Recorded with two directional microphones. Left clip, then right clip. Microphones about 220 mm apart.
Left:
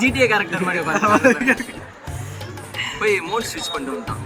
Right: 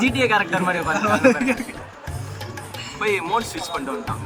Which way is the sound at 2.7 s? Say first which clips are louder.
Left 3 dB; 15° right (ahead or behind).